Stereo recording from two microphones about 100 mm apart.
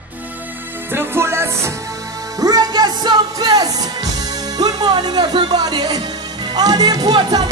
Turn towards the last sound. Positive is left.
turn(degrees=-45)  # may be behind; listen again after turning